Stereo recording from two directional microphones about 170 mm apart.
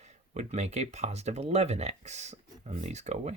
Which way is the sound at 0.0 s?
40° right (ahead or behind).